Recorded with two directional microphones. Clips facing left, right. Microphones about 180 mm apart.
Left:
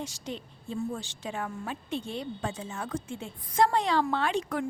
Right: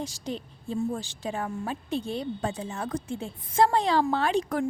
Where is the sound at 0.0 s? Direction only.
35° right (ahead or behind).